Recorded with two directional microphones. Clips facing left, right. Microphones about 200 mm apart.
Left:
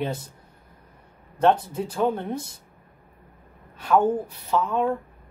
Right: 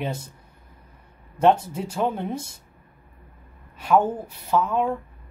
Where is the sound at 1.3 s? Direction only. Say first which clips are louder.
Right 1 dB; 10° right (ahead or behind).